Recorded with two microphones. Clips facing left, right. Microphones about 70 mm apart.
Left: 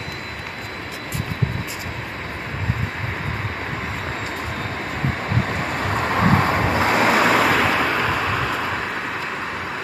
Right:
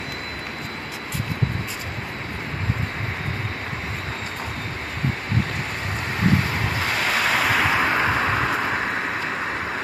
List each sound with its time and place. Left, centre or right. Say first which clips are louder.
6.1 s vehicle: left 3 dB; left
6.5 s vehicle: left 6 dB; left
7.5 s vehicle: left 2 dB; centre
7.8 s vehicle: even; centre